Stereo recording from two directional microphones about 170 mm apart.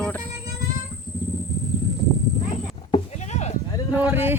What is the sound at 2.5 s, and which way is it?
Horse, 30° left (ahead or behind).